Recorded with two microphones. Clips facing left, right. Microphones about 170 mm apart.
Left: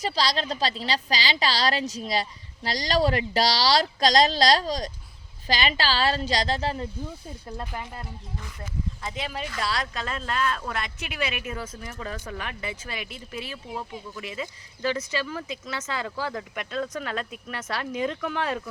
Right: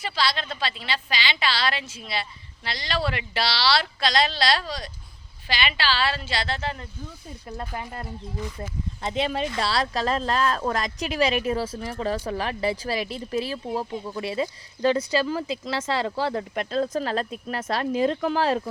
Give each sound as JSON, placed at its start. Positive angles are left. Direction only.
{"t": 0.0, "sound": "a woman's voice", "side_deg": 40}
{"t": 8.5, "sound": "speech", "side_deg": -30}